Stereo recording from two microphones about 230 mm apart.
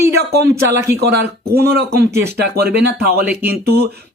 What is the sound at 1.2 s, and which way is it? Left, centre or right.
Speech, right.